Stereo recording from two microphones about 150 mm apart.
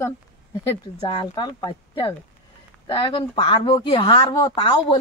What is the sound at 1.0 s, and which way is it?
Speech, 35° left (ahead or behind).